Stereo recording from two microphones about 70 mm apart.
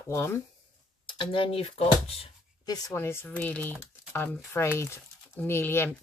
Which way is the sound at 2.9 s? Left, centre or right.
Left.